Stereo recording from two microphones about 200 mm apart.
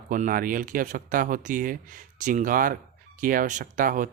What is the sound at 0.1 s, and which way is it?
Speech, 45° right (ahead or behind).